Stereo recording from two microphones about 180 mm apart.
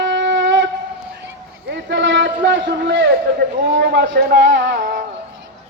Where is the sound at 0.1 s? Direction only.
90° right.